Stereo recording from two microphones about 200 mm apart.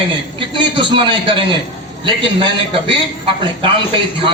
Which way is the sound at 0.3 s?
25° right (ahead or behind).